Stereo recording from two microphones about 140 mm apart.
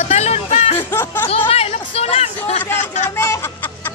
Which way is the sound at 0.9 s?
15° left (ahead or behind).